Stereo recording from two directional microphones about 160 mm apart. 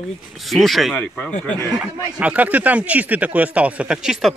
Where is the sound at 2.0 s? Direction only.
10° right (ahead or behind).